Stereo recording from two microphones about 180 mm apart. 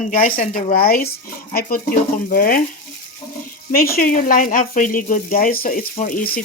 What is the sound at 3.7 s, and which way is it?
Speech, 55° left (ahead or behind).